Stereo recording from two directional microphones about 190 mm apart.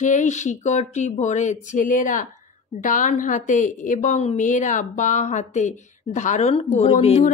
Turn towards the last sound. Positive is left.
turn(degrees=35)  # may be behind; listen again after turning